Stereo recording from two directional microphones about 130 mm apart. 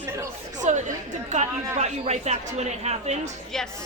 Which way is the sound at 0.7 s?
65° right (ahead or behind).